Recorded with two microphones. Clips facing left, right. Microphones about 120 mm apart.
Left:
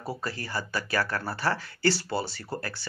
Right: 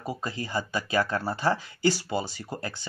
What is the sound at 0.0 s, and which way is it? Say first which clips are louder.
Speech: right 1 dB; 20° right (ahead or behind).